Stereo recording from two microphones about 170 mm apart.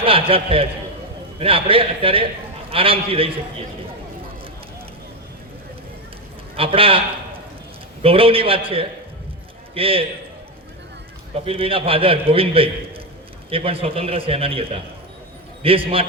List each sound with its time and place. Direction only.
0.0 s a man's voice: 35° right (ahead or behind)
6.6 s a man's voice: 35° right (ahead or behind)
8.0 s a man's voice: 35° right (ahead or behind)
11.3 s a man's voice: 35° right (ahead or behind)